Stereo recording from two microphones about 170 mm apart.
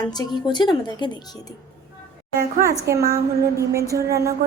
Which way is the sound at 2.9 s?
15° right (ahead or behind).